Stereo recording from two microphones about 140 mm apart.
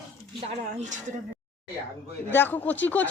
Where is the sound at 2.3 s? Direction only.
15° left (ahead or behind).